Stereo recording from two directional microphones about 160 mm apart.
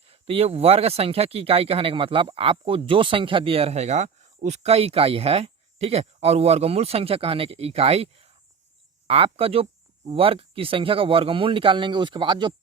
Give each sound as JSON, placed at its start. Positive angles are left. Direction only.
{"t": 0.1, "sound": "speech", "side_deg": -40}